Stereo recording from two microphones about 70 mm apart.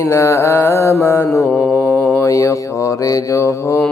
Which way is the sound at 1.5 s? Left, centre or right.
Left.